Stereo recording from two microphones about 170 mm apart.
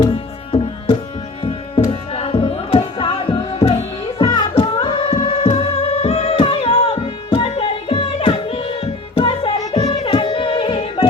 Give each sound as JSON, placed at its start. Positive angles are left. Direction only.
{"t": 1.9, "sound": "music", "side_deg": 35}
{"t": 9.6, "sound": "music", "side_deg": 20}